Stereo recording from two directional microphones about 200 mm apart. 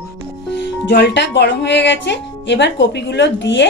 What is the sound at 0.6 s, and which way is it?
Speech, 60° left (ahead or behind).